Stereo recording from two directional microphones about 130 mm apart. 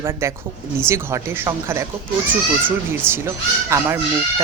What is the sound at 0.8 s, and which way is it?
Speech, 20° right (ahead or behind).